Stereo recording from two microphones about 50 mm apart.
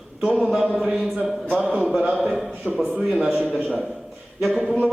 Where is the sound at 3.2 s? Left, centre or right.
Centre.